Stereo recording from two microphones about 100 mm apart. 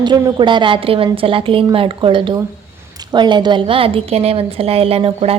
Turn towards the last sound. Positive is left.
turn(degrees=-70)  # may be behind; listen again after turning